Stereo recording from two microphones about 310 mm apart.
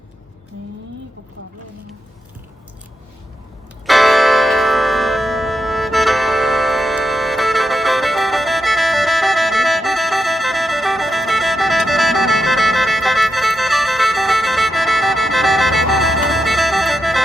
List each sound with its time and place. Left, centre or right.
3.8 s church bell: centre